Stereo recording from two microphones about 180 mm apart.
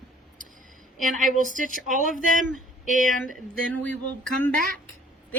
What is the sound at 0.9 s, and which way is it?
A woman's voice, 45° right (ahead or behind).